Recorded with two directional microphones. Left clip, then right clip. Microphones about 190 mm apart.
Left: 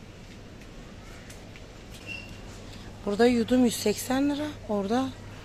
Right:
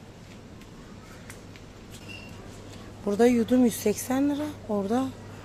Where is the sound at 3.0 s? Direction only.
10° right (ahead or behind).